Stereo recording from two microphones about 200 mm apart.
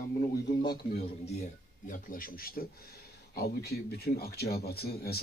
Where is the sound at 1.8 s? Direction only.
45° left (ahead or behind).